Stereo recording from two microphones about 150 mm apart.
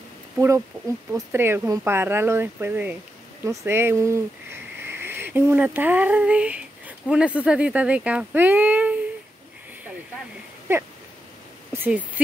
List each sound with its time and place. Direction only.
1.1 s speech: 15° right (ahead or behind)
10.7 s speech: 15° right (ahead or behind)